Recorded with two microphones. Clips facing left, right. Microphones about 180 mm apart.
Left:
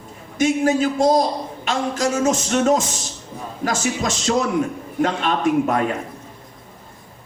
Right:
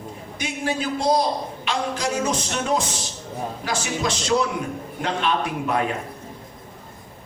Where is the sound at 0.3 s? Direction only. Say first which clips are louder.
Left 9 dB; 45° left (ahead or behind).